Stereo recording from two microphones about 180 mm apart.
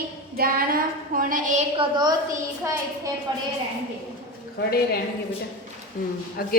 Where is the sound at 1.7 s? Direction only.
25° right (ahead or behind).